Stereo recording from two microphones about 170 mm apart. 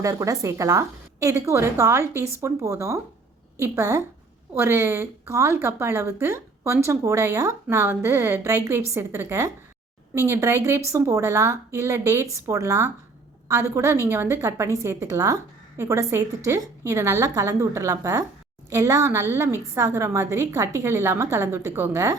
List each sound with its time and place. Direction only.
0.0 s a woman's voice: 20° right (ahead or behind)